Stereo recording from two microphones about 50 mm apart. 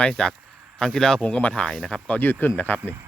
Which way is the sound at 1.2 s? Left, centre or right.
Left.